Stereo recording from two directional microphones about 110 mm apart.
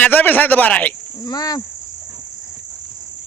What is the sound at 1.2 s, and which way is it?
Speech, 35° left (ahead or behind).